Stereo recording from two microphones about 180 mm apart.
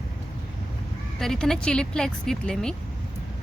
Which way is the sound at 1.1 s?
5° left (ahead or behind).